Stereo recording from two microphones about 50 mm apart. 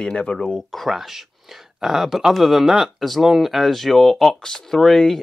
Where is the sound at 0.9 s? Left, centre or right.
Centre.